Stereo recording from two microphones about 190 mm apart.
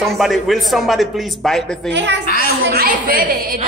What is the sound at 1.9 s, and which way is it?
Speech, 65° right (ahead or behind).